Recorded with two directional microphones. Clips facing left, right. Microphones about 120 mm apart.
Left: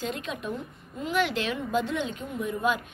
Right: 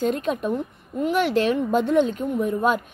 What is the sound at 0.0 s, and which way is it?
A woman's voice, 45° right (ahead or behind).